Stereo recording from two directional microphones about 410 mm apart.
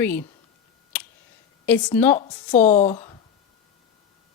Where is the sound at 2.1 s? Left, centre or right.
Centre.